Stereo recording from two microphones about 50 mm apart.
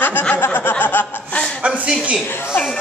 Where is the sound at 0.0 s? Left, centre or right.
Left.